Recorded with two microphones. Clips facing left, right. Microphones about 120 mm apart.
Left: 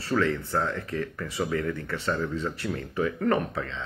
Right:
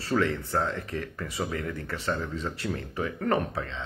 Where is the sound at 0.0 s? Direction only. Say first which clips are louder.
Left 1 dB; 20° right (ahead or behind).